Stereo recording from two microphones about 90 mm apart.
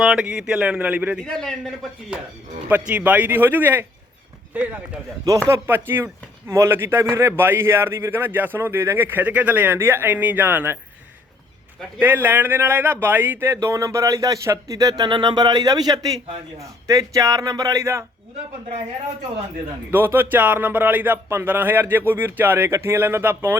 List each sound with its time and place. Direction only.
0.0 s a man's voice: 10° right (ahead or behind)
1.2 s a man's voice: 5° left (ahead or behind)
2.6 s a man's voice: 15° right (ahead or behind)
11.9 s speech: 25° right (ahead or behind); by 15.1 s 45° right (ahead or behind)
15.1 s speech: 60° right (ahead or behind); by 18.0 s 35° right (ahead or behind)
19.9 s speech: 25° right (ahead or behind)